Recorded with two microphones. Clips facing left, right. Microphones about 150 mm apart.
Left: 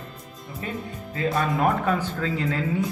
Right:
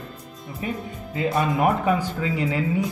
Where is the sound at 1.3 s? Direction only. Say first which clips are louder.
Right 2 dB; centre (ahead or behind).